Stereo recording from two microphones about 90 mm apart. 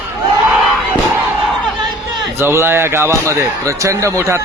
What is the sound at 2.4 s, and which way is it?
Speech, 25° right (ahead or behind).